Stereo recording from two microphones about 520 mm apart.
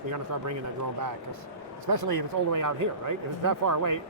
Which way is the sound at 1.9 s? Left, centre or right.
Right.